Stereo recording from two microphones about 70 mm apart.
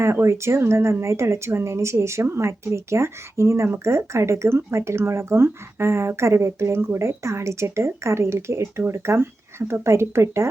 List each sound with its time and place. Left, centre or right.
0.0 s a woman's voice: right